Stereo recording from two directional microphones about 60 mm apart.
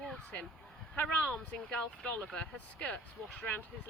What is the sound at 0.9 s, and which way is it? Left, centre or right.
Speech, left.